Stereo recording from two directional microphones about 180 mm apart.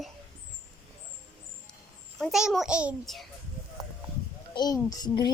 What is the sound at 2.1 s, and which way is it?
A child's voice, centre (ahead or behind).